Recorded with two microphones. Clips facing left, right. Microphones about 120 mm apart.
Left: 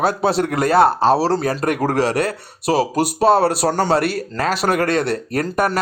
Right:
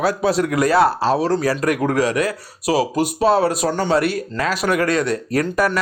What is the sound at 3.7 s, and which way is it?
Speech, 35° left (ahead or behind).